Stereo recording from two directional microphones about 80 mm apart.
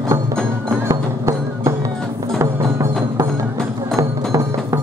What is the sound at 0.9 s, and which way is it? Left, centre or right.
Music, right.